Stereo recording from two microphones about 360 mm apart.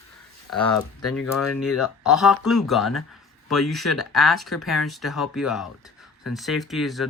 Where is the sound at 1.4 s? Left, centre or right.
Centre.